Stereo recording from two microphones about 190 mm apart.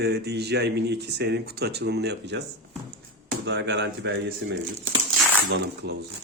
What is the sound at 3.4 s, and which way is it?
Speech, 70° right (ahead or behind).